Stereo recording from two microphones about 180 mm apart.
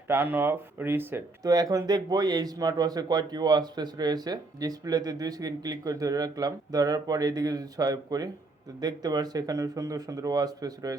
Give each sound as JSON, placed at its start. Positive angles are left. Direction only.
{"t": 0.1, "sound": "speech", "side_deg": -10}